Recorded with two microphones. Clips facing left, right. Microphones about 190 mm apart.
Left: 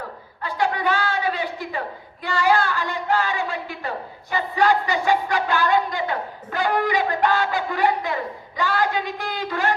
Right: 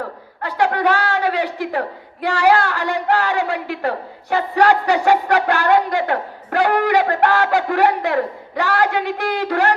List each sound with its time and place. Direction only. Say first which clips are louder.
0.4 s a man's voice: right 5 dB; 70° right (ahead or behind)